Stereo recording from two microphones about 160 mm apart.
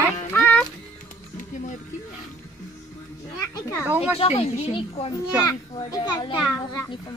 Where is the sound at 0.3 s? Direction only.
10° left (ahead or behind).